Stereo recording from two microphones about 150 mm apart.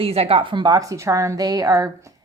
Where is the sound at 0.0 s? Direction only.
40° right (ahead or behind).